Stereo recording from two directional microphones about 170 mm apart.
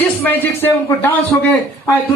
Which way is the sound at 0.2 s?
10° left (ahead or behind).